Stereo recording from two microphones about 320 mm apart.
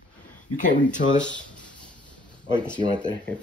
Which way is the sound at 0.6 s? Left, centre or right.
Left.